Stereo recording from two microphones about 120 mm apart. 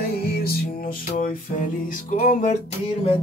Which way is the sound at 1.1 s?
85° left.